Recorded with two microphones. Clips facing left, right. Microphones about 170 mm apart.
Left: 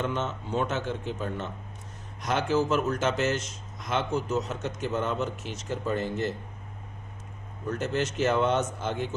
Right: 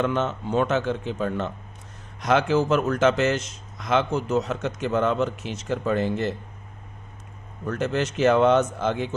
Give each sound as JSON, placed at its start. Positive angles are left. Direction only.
{"t": 0.0, "sound": "speech", "side_deg": -65}
{"t": 7.7, "sound": "speech", "side_deg": -75}